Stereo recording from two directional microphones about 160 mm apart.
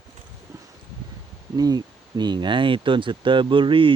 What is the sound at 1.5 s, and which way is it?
Speech, 25° right (ahead or behind).